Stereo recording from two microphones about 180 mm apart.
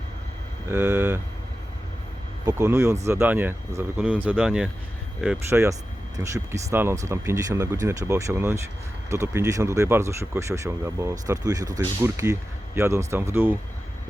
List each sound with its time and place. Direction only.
0.7 s speech: 10° right (ahead or behind)
2.5 s speech: 15° right (ahead or behind)
5.5 s speech: 15° right (ahead or behind)